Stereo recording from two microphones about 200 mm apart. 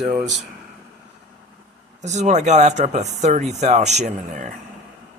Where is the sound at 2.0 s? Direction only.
35° right (ahead or behind).